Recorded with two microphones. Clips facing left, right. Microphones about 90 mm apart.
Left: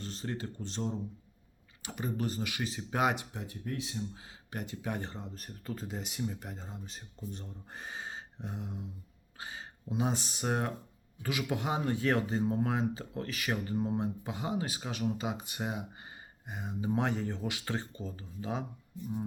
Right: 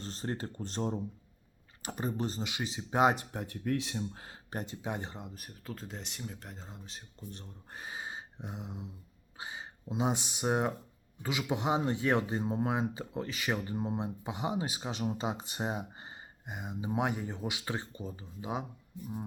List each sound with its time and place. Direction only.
0.0 s speech: 35° right (ahead or behind)
3.2 s speech: 55° right (ahead or behind)
4.5 s speech: 30° right (ahead or behind)
16.5 s speech: 15° right (ahead or behind)